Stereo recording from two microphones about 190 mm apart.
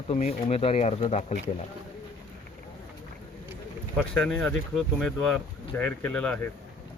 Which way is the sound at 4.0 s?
5° left (ahead or behind).